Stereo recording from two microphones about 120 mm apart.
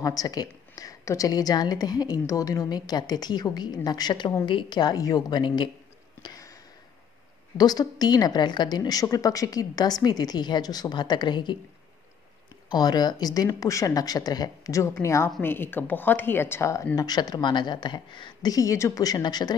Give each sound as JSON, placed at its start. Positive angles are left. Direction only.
{"t": 0.0, "sound": "a woman's voice", "side_deg": 30}
{"t": 6.2, "sound": "a sound", "side_deg": 30}
{"t": 7.5, "sound": "a woman's voice", "side_deg": 35}
{"t": 12.6, "sound": "a woman's voice", "side_deg": 35}